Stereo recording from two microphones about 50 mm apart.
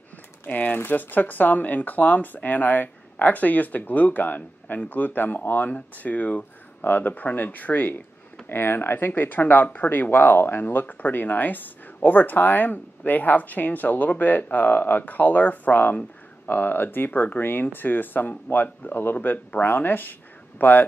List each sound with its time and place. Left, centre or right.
0.5 s speech: left